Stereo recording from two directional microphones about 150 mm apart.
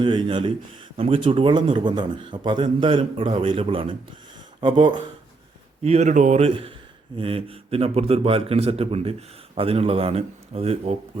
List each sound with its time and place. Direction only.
0.0 s a man's voice: 30° right (ahead or behind)
5.8 s a man's voice: 45° right (ahead or behind)